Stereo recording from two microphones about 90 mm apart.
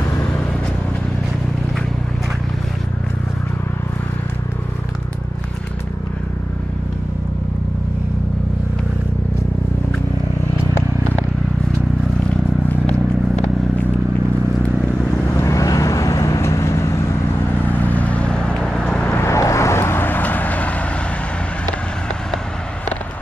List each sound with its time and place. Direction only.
15.4 s vehicle: 40° left (ahead or behind)
17.6 s vehicle: 20° left (ahead or behind)
19.1 s vehicle: 35° left (ahead or behind); by 20.7 s 15° left (ahead or behind)